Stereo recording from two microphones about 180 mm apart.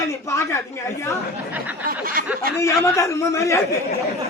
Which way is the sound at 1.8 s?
55° right (ahead or behind).